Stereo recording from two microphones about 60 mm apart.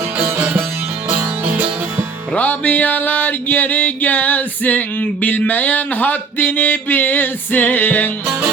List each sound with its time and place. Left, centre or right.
0.2 s music: right
2.3 s music: left